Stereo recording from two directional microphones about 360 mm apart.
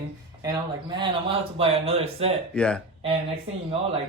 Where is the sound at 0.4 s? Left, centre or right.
Centre.